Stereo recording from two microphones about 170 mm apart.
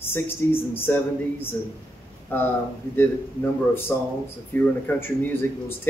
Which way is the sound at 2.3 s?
10° left (ahead or behind).